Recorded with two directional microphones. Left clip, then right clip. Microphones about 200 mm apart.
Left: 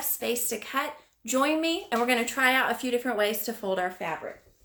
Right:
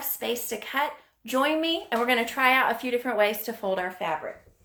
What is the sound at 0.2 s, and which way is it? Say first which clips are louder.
Speech: even; 20° left (ahead or behind).